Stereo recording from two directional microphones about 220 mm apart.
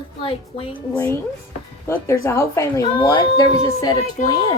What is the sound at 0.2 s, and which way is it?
Speech, 25° left (ahead or behind).